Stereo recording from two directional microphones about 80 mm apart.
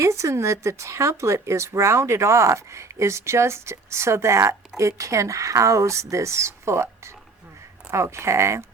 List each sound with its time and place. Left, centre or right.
0.0 s speech: right